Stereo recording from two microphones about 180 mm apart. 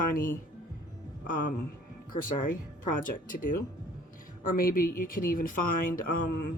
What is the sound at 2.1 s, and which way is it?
Speech, 50° left (ahead or behind).